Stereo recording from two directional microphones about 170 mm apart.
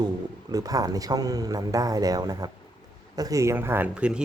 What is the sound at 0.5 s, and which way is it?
A man's voice, 20° right (ahead or behind).